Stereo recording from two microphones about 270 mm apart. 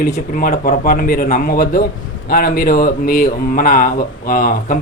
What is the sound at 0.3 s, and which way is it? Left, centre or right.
Speech, left.